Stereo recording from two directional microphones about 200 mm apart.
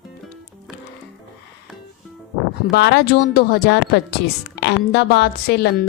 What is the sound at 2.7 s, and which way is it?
Speech, 55° left (ahead or behind).